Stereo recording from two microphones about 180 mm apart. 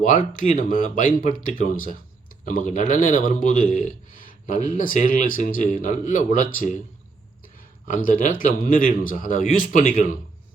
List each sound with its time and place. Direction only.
0.0 s speech: 45° left (ahead or behind)
7.9 s speech: 45° left (ahead or behind)